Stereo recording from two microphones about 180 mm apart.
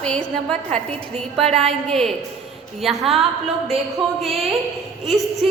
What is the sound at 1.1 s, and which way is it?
Speech, 35° right (ahead or behind).